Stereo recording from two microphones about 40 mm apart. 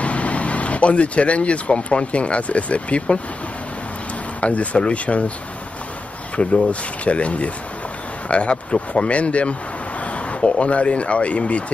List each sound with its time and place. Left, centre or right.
0.0 s speech: left
4.4 s speech: left
6.3 s speech: left